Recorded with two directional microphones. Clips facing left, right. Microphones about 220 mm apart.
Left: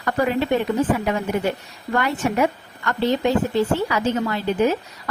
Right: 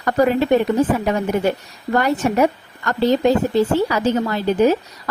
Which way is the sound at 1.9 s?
40° right (ahead or behind).